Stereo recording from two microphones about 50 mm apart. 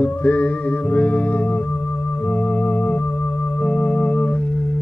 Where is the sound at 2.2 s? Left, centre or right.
Left.